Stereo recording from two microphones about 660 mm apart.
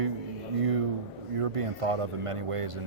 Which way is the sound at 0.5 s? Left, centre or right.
Right.